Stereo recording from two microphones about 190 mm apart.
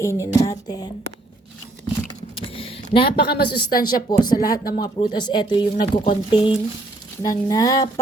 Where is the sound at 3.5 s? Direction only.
25° left (ahead or behind).